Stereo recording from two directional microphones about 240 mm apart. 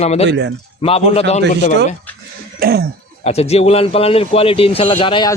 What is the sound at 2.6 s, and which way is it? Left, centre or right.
Speech, right.